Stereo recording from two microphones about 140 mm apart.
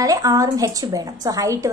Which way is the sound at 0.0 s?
25° right (ahead or behind).